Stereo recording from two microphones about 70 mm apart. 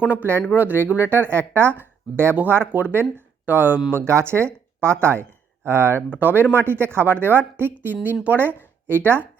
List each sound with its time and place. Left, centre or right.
0.0 s speech: right
3.9 s speech: right
6.1 s speech: right